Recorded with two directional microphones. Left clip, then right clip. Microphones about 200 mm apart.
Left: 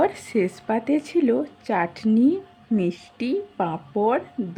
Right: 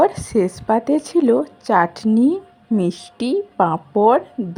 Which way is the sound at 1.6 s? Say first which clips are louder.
Right 9 dB; 20° right (ahead or behind).